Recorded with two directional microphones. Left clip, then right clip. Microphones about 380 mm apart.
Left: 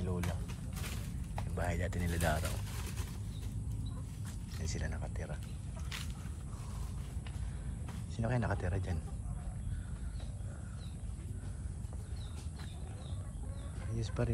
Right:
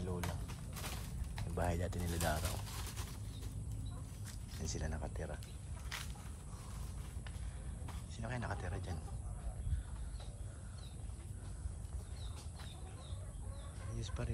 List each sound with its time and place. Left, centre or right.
0.0 s a sound: centre
1.5 s speech: centre
4.6 s speech: centre
8.2 s speech: centre
13.9 s speech: centre